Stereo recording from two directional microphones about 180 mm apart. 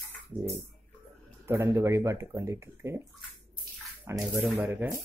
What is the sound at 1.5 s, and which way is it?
Speech, 15° right (ahead or behind).